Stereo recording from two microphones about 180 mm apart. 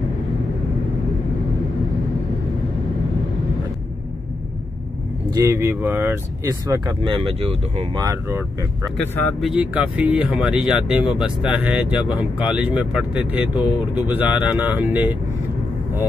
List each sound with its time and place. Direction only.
5.3 s speech: 15° right (ahead or behind)
7.0 s speech: 30° right (ahead or behind)
8.0 s speech: 15° right (ahead or behind)
8.9 s speech: 10° left (ahead or behind)
9.4 s speech: 5° right (ahead or behind)